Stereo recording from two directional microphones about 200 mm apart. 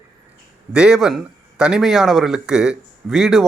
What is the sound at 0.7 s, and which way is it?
Speech, 5° right (ahead or behind).